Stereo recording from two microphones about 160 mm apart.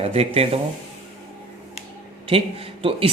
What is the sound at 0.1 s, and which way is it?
Speech, 40° right (ahead or behind).